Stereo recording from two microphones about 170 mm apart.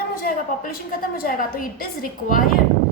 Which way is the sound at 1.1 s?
55° left (ahead or behind).